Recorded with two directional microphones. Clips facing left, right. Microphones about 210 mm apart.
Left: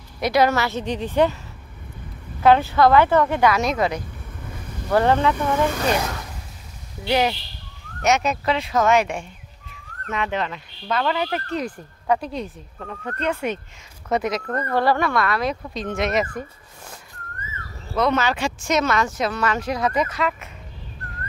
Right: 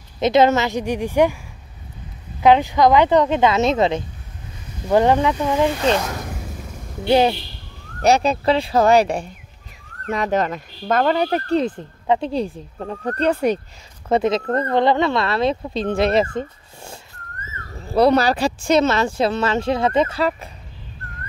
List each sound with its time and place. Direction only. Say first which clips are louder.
0.2 s a woman's voice: right 4 dB; 20° right (ahead or behind)
2.4 s a woman's voice: right 2 dB; 15° right (ahead or behind)
7.1 s speech: right 5 dB; 30° right (ahead or behind)